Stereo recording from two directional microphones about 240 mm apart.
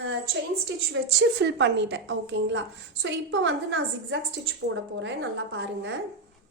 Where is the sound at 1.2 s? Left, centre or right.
Right.